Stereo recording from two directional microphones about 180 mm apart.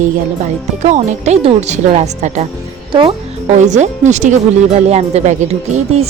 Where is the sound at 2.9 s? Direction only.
30° right (ahead or behind).